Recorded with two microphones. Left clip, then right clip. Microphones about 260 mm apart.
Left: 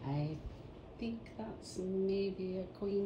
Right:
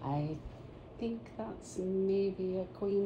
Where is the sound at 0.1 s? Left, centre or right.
Right.